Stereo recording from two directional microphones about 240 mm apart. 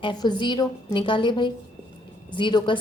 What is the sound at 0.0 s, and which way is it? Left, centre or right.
Speech, centre.